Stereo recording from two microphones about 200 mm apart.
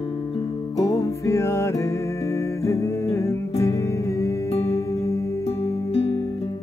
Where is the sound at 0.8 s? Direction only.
15° left (ahead or behind).